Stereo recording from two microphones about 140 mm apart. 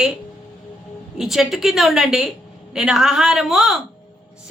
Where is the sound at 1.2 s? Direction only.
Centre (ahead or behind).